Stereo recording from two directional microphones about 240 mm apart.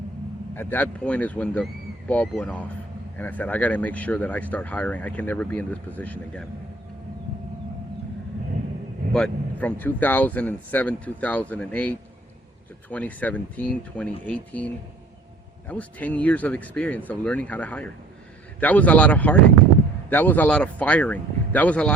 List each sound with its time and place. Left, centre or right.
0.5 s speech: centre
9.1 s speech: centre